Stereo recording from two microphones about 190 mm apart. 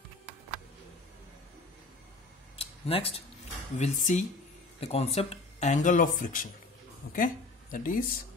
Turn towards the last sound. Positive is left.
turn(degrees=45)  # may be behind; listen again after turning